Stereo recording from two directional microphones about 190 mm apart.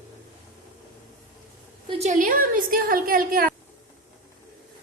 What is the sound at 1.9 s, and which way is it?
A woman's voice, 35° right (ahead or behind).